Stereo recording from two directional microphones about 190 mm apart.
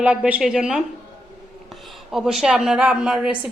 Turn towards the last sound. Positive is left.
turn(degrees=-5)  # may be behind; listen again after turning